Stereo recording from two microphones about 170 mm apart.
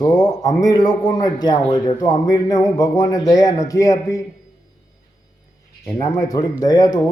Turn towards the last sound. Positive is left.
turn(degrees=25)  # may be behind; listen again after turning